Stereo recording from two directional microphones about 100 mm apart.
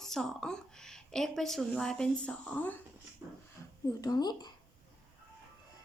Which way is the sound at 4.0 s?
40° left (ahead or behind).